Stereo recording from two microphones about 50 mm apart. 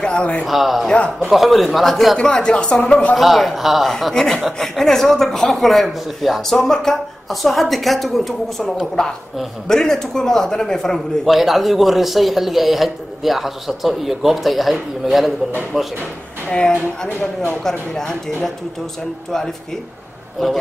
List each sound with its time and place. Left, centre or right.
0.0 s speech: left
0.5 s a man's voice: centre
2.1 s speech: centre
3.2 s a man's voice: centre
4.1 s a man's voice: centre
9.7 s a man's voice: centre
11.2 s a man's voice: centre
16.4 s a man's voice: centre
20.4 s a man's voice: centre